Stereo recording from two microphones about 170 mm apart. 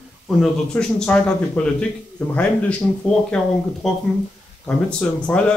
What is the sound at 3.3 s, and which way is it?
Speech, 5° left (ahead or behind).